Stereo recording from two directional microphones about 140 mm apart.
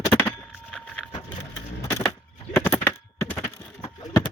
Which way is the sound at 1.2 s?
15° left (ahead or behind).